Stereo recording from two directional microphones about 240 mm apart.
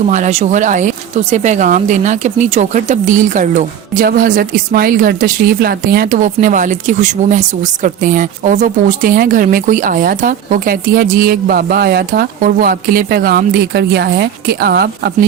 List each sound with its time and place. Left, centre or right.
0.1 s speech: right